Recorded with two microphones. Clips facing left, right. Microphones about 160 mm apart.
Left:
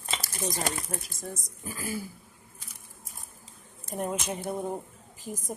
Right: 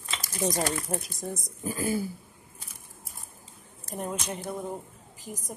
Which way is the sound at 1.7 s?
30° right (ahead or behind).